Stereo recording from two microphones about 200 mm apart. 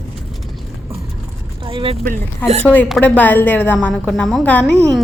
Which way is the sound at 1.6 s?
25° right (ahead or behind).